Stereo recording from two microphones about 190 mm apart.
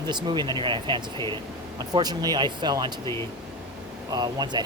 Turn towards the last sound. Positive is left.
turn(degrees=-20)  # may be behind; listen again after turning